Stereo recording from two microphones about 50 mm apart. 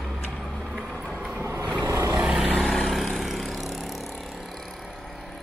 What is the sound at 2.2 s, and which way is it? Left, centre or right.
Vehicle, centre.